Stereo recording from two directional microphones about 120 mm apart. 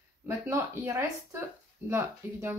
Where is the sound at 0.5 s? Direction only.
25° right (ahead or behind).